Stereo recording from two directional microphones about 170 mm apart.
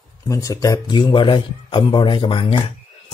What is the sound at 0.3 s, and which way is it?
Speech, 20° left (ahead or behind).